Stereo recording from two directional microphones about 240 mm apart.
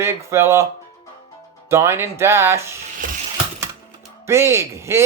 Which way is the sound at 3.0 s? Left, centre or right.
Right.